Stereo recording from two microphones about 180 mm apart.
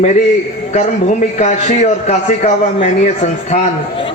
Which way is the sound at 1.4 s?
40° left (ahead or behind).